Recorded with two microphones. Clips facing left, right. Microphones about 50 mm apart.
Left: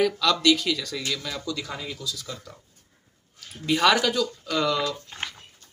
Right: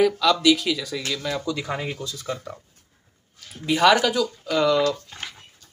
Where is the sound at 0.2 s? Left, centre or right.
Centre.